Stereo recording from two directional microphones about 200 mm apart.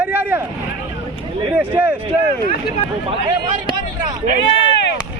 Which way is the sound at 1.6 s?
10° right (ahead or behind).